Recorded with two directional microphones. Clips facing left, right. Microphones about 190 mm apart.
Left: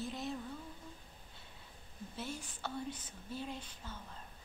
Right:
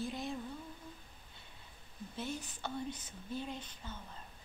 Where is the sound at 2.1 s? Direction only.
5° left (ahead or behind).